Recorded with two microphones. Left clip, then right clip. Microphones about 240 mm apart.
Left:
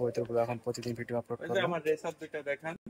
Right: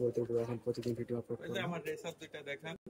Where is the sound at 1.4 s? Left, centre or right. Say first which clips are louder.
Left 9 dB; left.